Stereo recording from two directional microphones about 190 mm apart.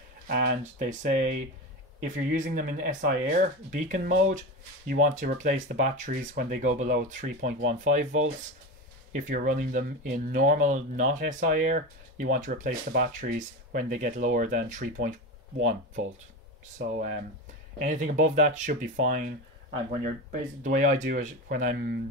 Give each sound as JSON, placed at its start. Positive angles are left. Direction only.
{"t": 0.3, "sound": "speech", "side_deg": -50}
{"t": 16.7, "sound": "speech", "side_deg": -45}